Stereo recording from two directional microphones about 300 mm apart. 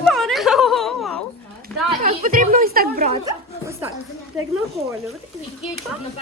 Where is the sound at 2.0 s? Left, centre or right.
Right.